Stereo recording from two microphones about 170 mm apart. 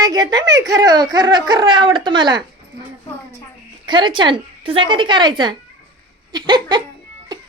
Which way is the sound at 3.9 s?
30° right (ahead or behind).